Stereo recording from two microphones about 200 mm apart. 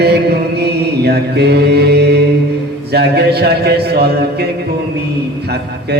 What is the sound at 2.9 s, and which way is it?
A man's voice, 55° right (ahead or behind).